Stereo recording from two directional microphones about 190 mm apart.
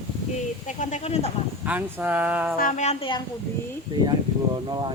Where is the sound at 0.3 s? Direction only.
40° left (ahead or behind).